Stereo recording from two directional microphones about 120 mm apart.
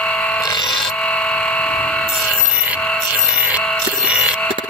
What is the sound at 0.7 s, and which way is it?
Tools, centre (ahead or behind).